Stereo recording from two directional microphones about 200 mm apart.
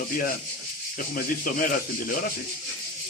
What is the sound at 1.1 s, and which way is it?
Speech, 45° left (ahead or behind).